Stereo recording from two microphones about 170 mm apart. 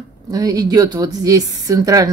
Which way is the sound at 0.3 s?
20° right (ahead or behind).